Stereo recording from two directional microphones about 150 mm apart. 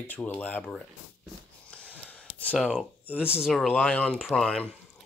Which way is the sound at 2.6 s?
Centre (ahead or behind).